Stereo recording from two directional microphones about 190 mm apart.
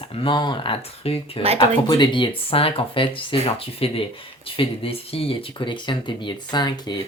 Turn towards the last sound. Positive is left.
turn(degrees=20)  # may be behind; listen again after turning